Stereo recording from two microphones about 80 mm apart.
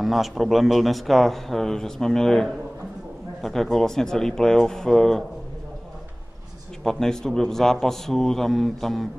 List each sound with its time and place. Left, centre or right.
0.0 s a man's voice: centre
3.7 s a man's voice: centre
6.8 s a man's voice: centre